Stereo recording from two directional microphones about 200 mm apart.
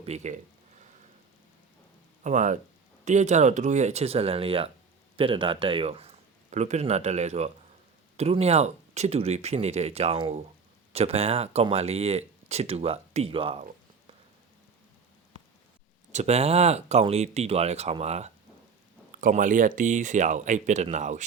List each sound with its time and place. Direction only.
0.0 s speech: 35° right (ahead or behind)
2.2 s speech: 35° right (ahead or behind)
16.1 s speech: 35° right (ahead or behind)